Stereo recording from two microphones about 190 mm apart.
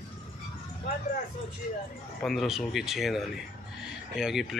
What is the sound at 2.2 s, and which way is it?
Speech, centre (ahead or behind).